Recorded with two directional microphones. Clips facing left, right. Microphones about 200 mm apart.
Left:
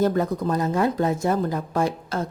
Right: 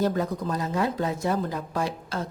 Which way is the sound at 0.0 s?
50° left (ahead or behind).